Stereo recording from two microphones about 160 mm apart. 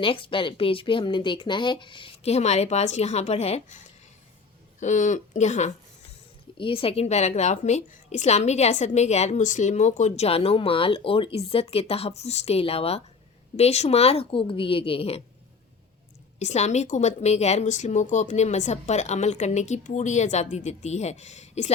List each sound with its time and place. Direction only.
0.0 s a woman's voice: 35° left (ahead or behind)
6.6 s a woman's voice: 35° left (ahead or behind)
16.4 s a woman's voice: 45° left (ahead or behind)